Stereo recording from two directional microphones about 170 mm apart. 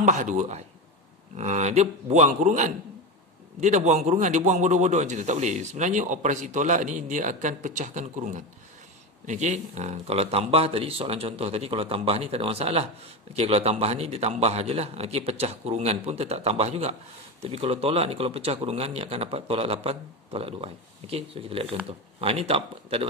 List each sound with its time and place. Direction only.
0.0 s a man's voice: 45° right (ahead or behind)